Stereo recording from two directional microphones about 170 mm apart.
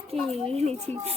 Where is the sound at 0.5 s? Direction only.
40° right (ahead or behind).